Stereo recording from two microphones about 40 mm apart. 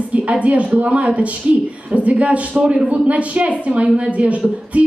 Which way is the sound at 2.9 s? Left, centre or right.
Right.